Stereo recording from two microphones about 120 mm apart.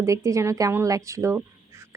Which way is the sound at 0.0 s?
25° right (ahead or behind).